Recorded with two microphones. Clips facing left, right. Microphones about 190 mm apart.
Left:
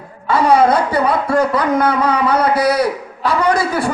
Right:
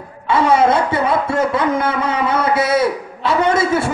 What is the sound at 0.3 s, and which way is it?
Speech, 25° right (ahead or behind).